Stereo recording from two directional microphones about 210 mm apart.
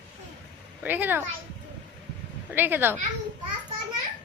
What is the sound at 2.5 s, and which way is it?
Speech, 10° right (ahead or behind).